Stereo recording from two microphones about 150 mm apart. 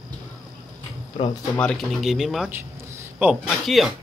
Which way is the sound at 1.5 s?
5° left (ahead or behind).